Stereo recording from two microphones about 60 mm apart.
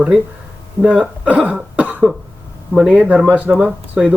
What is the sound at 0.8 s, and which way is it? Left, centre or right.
Speech, right.